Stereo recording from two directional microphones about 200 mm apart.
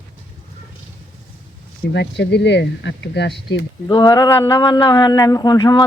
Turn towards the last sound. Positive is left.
turn(degrees=20)  # may be behind; listen again after turning